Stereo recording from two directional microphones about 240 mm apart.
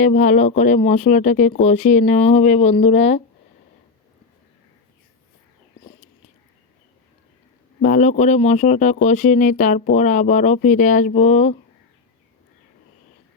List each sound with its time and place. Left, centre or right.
0.0 s speech: left
7.8 s speech: left